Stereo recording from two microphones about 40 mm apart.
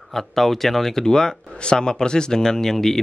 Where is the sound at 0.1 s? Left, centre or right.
Centre.